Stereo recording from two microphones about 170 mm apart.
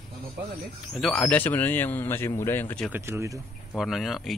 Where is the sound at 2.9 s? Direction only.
15° right (ahead or behind).